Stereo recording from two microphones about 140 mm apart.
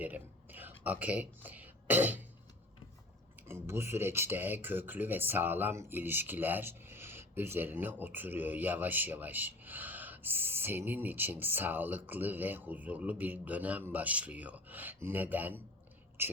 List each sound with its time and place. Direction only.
0.0 s a sound: 10° right (ahead or behind)
0.9 s speech: 10° right (ahead or behind)
3.4 s speech: 15° right (ahead or behind)